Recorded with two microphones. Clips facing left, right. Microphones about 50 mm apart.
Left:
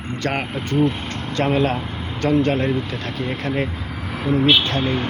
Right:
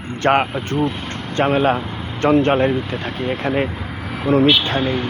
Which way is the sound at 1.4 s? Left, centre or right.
Right.